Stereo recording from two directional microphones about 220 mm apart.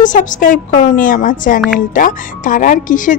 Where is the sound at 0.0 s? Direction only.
35° left (ahead or behind).